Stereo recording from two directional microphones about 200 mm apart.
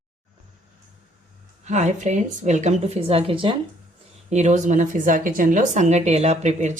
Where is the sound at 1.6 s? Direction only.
35° right (ahead or behind).